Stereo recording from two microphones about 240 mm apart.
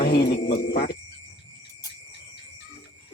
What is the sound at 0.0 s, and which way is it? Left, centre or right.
Speech, left.